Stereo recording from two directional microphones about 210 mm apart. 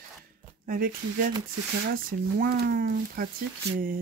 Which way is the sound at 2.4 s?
45° right (ahead or behind).